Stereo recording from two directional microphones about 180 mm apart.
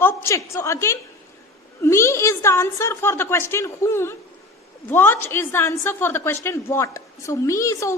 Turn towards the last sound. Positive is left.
turn(degrees=15)  # may be behind; listen again after turning